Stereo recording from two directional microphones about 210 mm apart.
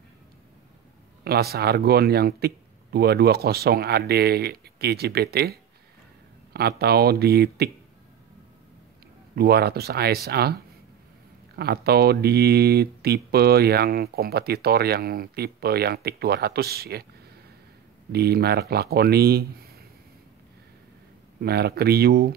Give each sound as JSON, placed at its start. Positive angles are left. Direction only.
{"t": 1.2, "sound": "speech", "side_deg": -50}
{"t": 9.3, "sound": "speech", "side_deg": -50}
{"t": 18.1, "sound": "speech", "side_deg": -50}
{"t": 21.4, "sound": "speech", "side_deg": -50}